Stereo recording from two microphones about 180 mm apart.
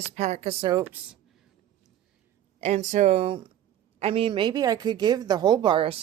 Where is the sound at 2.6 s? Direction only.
40° right (ahead or behind).